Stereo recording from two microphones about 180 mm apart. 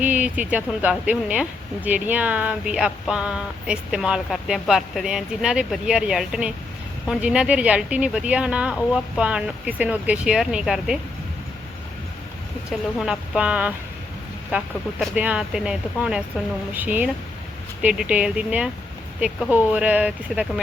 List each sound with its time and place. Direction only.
0.0 s speech: 10° right (ahead or behind)
13.0 s speech: 5° right (ahead or behind)